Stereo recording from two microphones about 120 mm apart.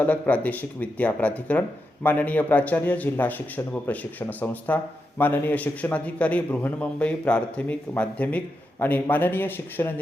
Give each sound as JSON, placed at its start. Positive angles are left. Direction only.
{"t": 0.0, "sound": "a man's voice", "side_deg": 10}